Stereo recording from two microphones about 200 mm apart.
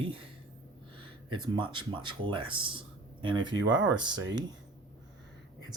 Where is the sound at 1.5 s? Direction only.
25° right (ahead or behind).